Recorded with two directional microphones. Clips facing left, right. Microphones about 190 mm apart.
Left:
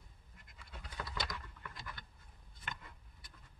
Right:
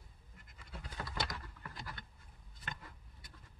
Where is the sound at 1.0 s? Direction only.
35° right (ahead or behind).